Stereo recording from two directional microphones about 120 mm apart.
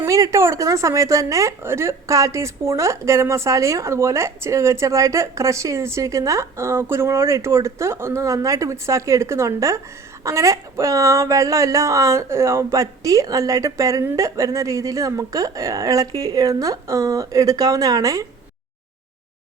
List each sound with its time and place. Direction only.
0.0 s a woman's voice: 25° right (ahead or behind)